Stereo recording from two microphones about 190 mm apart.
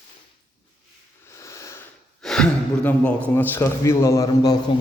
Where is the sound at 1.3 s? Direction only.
15° left (ahead or behind).